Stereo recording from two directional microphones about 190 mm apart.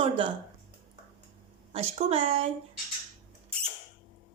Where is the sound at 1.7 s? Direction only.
30° right (ahead or behind).